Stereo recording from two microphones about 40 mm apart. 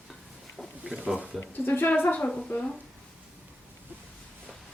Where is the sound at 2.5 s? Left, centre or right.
Left.